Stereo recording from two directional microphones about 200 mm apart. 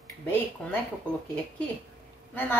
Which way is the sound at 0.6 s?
5° left (ahead or behind).